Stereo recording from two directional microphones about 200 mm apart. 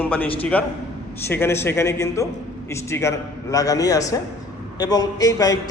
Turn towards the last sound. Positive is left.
turn(degrees=20)  # may be behind; listen again after turning